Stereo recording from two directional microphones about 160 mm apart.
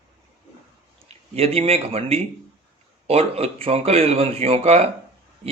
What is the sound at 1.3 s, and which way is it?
Speech, 40° right (ahead or behind).